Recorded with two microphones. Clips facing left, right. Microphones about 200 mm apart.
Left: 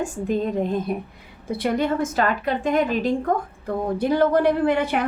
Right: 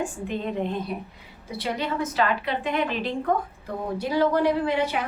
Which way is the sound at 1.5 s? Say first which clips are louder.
Left 7 dB; 50° left (ahead or behind).